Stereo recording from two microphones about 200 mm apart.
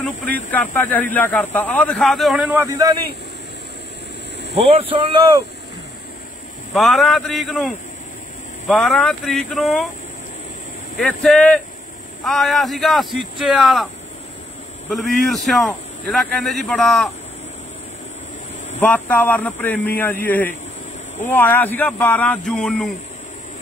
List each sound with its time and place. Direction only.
0.0 s a man's voice: 5° left (ahead or behind); by 3.0 s 15° right (ahead or behind)
4.6 s speech: 25° right (ahead or behind)
6.7 s a man's voice: centre (ahead or behind)
11.0 s a man's voice: centre (ahead or behind)
14.9 s a man's voice: centre (ahead or behind)
18.8 s speech: 5° left (ahead or behind)